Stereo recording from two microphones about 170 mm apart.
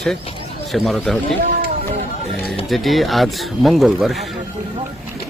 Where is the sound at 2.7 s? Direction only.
Centre (ahead or behind).